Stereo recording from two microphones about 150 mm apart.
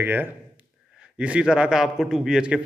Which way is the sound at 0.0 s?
10° right (ahead or behind).